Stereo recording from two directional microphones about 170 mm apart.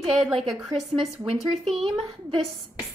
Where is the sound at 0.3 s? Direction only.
Centre (ahead or behind).